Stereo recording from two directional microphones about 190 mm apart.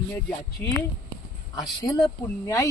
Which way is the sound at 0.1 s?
10° left (ahead or behind).